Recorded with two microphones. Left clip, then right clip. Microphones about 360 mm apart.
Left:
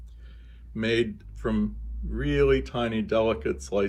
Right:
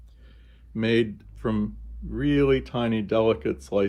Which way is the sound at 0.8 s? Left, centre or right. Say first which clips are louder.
Right 2 dB; right.